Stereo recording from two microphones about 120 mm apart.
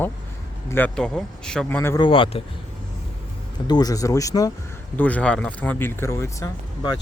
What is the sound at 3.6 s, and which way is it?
Speech, 35° left (ahead or behind).